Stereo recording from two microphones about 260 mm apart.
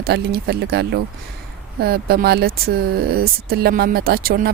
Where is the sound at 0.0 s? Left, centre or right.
Right.